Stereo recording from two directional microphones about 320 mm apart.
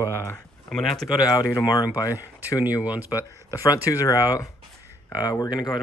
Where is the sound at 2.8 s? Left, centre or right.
Centre.